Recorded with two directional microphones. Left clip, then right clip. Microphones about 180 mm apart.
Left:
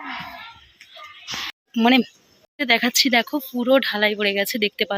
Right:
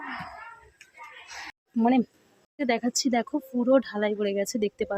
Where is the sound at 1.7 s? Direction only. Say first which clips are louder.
Left 6 dB; centre (ahead or behind).